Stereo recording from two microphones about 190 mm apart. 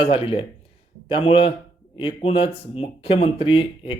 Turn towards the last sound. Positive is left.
turn(degrees=25)  # may be behind; listen again after turning